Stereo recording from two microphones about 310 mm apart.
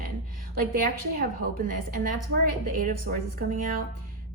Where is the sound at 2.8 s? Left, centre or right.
Right.